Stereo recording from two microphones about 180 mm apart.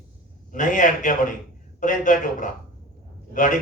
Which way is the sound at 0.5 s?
45° left (ahead or behind).